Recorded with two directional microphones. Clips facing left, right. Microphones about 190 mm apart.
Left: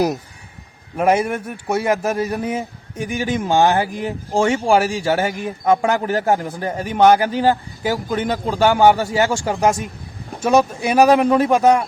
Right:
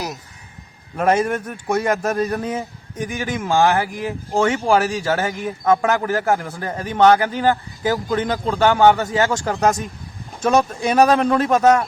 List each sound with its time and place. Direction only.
0.9 s a man's voice: 10° left (ahead or behind); by 4.1 s 25° left (ahead or behind)
4.6 s a man's voice: 10° left (ahead or behind)